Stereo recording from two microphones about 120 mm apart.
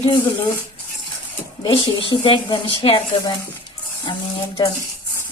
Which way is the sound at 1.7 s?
45° left (ahead or behind).